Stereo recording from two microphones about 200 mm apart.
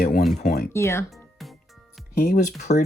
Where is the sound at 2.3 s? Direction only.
35° left (ahead or behind).